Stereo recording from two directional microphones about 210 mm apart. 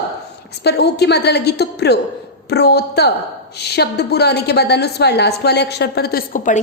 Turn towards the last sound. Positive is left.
turn(degrees=40)  # may be behind; listen again after turning